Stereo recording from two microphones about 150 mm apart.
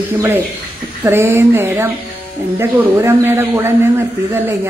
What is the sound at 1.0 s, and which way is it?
Speech, 15° right (ahead or behind).